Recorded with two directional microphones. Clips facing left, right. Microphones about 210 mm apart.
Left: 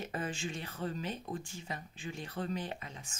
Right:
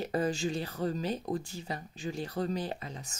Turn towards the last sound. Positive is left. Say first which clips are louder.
# right 5 dB
turn(degrees=-35)  # may be behind; listen again after turning